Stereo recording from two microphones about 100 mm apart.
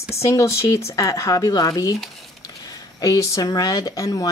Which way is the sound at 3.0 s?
35° left (ahead or behind).